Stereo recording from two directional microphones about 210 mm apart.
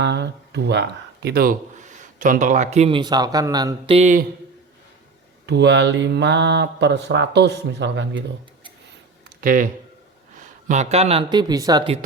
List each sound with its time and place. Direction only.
0.0 s speech: 55° right (ahead or behind); by 3.9 s 20° right (ahead or behind)
3.9 s speech: 35° right (ahead or behind)
5.5 s speech: 55° right (ahead or behind)
9.4 s speech: 40° right (ahead or behind)
10.7 s speech: 30° right (ahead or behind)